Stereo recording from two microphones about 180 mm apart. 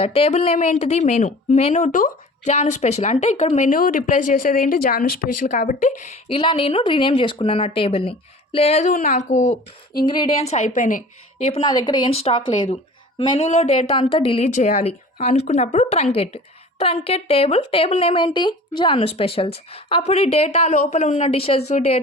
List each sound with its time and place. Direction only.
0.0 s speech: 30° left (ahead or behind)
6.3 s speech: 30° left (ahead or behind)
10.0 s speech: 25° left (ahead or behind)
10.4 s speech: 40° left (ahead or behind)